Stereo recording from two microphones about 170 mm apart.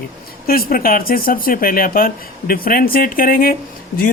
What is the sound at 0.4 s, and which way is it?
Speech, 60° left (ahead or behind).